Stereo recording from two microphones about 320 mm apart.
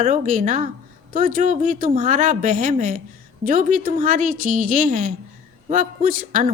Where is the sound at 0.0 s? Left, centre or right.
Right.